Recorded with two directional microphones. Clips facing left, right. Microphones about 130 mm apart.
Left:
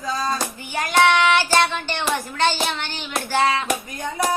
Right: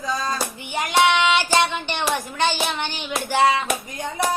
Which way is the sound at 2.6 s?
15° right (ahead or behind).